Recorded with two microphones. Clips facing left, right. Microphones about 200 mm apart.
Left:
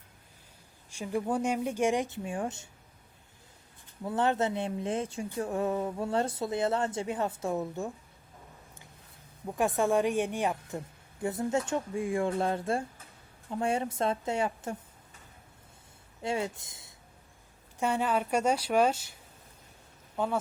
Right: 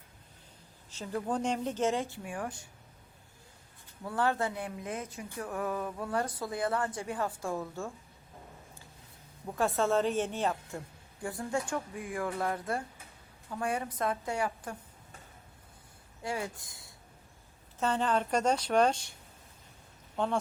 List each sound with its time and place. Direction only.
0.9 s speech: 10° left (ahead or behind)
4.0 s speech: 20° left (ahead or behind)
9.6 s speech: 15° left (ahead or behind)
16.2 s speech: 25° left (ahead or behind)
17.7 s speech: 10° left (ahead or behind)
20.1 s speech: 5° left (ahead or behind)